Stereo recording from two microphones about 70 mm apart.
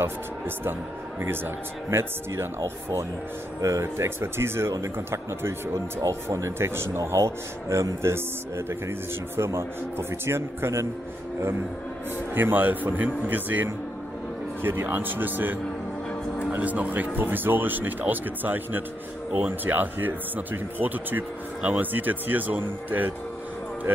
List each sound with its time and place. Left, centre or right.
1.2 s a man's voice: right
12.4 s speech: right